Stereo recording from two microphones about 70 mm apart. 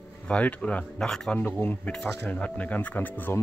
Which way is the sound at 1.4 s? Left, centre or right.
Left.